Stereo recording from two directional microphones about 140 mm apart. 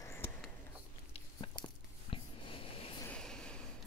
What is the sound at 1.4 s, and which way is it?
Biting, 35° left (ahead or behind).